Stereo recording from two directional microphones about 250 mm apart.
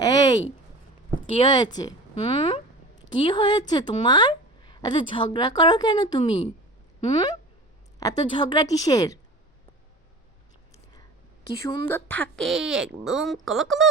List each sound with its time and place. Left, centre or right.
0.0 s a sound: centre
1.4 s a woman's voice: centre
11.6 s a woman's voice: centre